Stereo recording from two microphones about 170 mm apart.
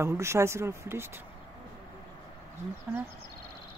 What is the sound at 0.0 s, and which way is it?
Speech, 15° right (ahead or behind).